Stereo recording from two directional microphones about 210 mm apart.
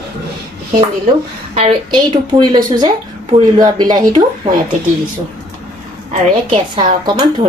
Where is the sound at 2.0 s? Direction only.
20° right (ahead or behind).